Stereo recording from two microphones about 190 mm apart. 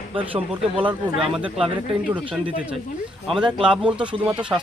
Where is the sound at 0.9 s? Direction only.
5° right (ahead or behind).